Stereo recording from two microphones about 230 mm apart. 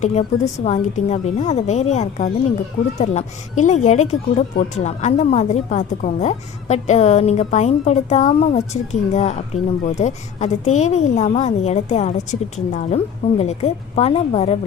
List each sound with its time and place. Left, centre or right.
0.0 s speech: left